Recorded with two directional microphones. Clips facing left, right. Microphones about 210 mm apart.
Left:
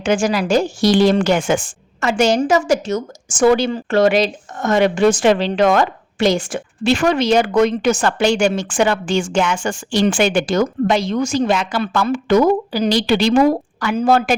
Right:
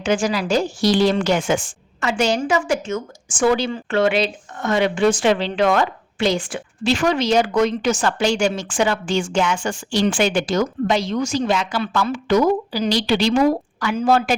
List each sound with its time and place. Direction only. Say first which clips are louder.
0.0 s a woman's voice: left 3 dB; 50° left (ahead or behind)